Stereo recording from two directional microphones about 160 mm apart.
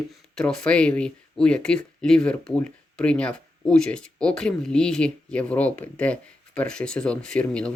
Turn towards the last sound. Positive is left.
turn(degrees=5)  # may be behind; listen again after turning